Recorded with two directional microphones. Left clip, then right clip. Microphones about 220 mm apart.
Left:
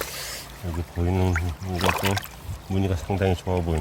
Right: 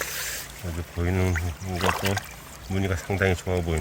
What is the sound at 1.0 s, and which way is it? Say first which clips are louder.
Speech: left 1 dB; centre (ahead or behind).